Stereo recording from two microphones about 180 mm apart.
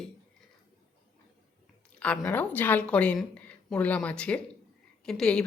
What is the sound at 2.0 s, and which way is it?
A woman's voice, 5° left (ahead or behind).